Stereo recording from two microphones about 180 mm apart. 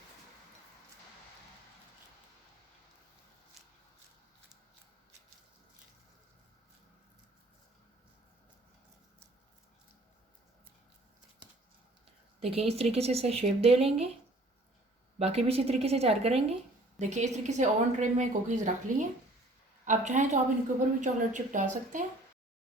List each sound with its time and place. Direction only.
12.4 s a woman's voice: 35° right (ahead or behind)
15.2 s a woman's voice: 35° right (ahead or behind)